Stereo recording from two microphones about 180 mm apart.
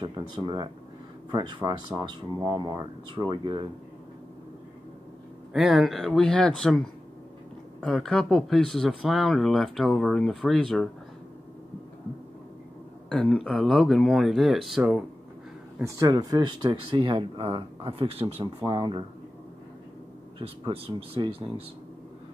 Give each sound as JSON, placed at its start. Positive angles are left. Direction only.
{"t": 0.0, "sound": "speech", "side_deg": -25}
{"t": 5.5, "sound": "speech", "side_deg": 0}
{"t": 13.1, "sound": "speech", "side_deg": 0}
{"t": 15.8, "sound": "speech", "side_deg": -20}
{"t": 20.3, "sound": "speech", "side_deg": -30}